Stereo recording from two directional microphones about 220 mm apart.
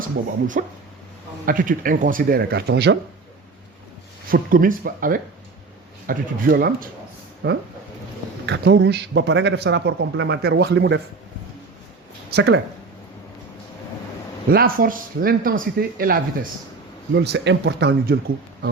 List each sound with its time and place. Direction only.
0.6 s speech: 40° right (ahead or behind)
4.3 s speech: 40° right (ahead or behind)
12.3 s speech: 45° right (ahead or behind)
14.5 s speech: 40° right (ahead or behind)
17.2 s speech: 55° right (ahead or behind)